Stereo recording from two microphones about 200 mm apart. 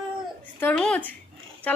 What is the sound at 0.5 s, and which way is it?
Speech, 5° left (ahead or behind).